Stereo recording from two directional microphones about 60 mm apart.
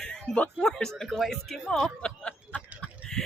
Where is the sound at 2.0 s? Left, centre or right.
Centre.